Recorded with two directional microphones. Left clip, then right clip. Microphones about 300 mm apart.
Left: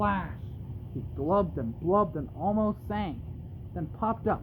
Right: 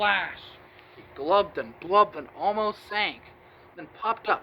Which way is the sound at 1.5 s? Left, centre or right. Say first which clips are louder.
Right 5 dB; centre.